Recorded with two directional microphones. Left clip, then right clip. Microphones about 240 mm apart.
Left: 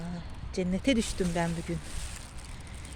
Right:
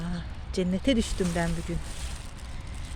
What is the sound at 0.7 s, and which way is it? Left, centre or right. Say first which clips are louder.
Speech: right 1 dB; centre.